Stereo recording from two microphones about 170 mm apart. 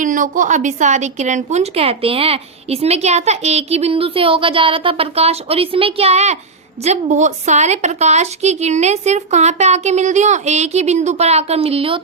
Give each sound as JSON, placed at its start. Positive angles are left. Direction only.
{"t": 0.0, "sound": "speech", "side_deg": -50}